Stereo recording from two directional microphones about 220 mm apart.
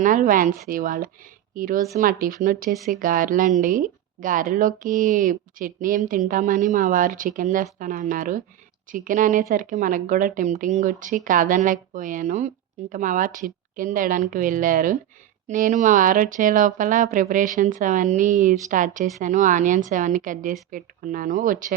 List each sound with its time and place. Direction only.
0.0 s speech: 35° right (ahead or behind)